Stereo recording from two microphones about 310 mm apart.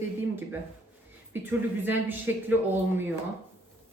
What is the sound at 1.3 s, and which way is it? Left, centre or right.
A woman's voice, centre.